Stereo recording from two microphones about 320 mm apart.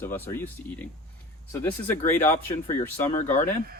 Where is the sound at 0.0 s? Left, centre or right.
Centre.